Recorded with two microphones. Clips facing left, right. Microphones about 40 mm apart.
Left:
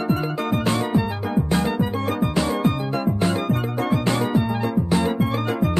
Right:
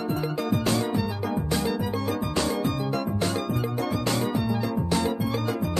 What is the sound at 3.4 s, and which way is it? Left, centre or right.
Music, left.